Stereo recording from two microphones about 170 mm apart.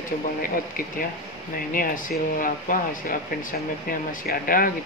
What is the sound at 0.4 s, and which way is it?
Speech, 55° left (ahead or behind).